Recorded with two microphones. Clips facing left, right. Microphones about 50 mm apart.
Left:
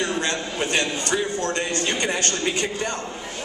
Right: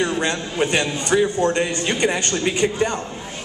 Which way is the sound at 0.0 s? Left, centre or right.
Centre.